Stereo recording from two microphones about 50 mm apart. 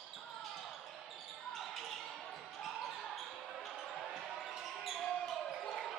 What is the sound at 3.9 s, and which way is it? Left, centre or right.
Basketball bounce, centre.